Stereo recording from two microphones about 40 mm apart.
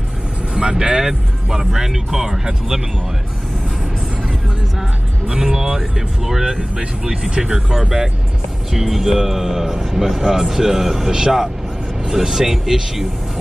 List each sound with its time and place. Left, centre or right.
0.6 s speech: right
5.3 s speech: centre
6.4 s speech: right